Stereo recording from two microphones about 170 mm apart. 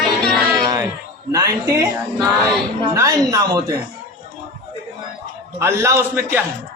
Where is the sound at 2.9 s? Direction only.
20° right (ahead or behind).